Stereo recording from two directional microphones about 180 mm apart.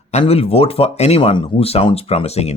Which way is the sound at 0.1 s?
35° left (ahead or behind).